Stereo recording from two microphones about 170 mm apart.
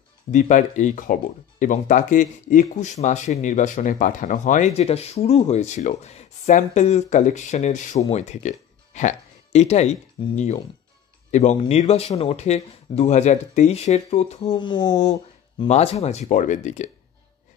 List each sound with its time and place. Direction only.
0.3 s speech: 45° left (ahead or behind); by 15.0 s 25° left (ahead or behind)
15.7 s speech: 40° left (ahead or behind)